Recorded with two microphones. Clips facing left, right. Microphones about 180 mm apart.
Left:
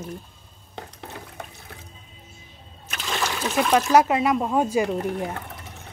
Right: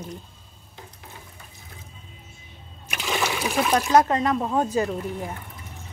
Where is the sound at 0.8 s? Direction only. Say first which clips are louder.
Left 7 dB; 70° left (ahead or behind).